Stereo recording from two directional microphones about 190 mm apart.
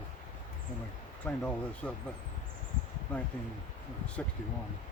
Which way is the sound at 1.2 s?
10° left (ahead or behind).